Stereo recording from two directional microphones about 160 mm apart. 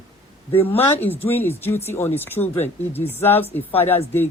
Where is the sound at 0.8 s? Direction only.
10° left (ahead or behind).